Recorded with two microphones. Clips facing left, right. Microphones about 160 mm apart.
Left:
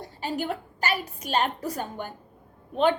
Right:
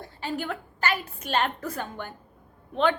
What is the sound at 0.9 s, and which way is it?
Speech, 10° left (ahead or behind).